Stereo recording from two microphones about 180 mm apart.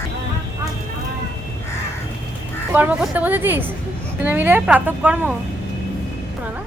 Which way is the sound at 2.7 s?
10° right (ahead or behind).